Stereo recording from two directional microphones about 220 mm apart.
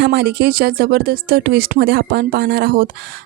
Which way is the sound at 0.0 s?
50° right (ahead or behind).